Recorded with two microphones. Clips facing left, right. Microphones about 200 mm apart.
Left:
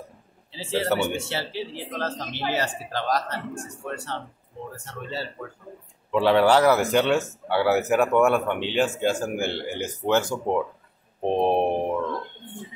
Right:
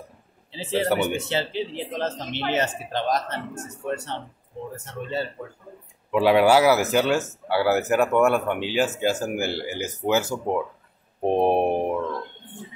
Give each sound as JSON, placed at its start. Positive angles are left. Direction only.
{"t": 0.5, "sound": "speech", "side_deg": -15}
{"t": 6.1, "sound": "speech", "side_deg": -10}